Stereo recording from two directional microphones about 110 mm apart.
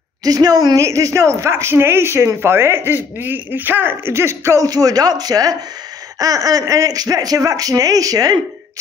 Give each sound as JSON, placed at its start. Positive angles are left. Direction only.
{"t": 0.2, "sound": "a woman's voice", "side_deg": -35}